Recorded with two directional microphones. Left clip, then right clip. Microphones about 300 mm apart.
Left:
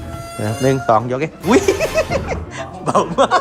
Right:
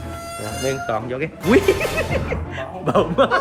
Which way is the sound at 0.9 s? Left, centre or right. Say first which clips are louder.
Left 9 dB; left.